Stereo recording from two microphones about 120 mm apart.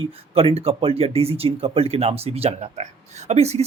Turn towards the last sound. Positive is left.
turn(degrees=-65)  # may be behind; listen again after turning